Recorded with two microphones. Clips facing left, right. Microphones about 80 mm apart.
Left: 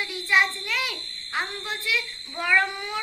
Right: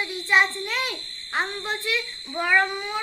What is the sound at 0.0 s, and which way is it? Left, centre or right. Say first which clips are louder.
Speech: right 2 dB; right.